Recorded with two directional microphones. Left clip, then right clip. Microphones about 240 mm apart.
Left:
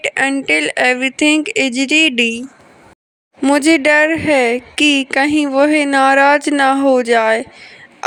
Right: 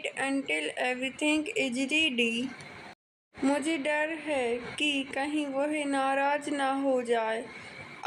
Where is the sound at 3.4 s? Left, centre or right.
Left.